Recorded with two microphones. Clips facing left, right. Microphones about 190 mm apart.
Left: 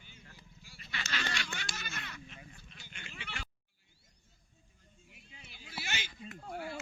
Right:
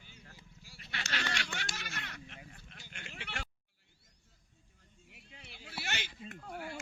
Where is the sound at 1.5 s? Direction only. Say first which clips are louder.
Right 1 dB; 65° right (ahead or behind).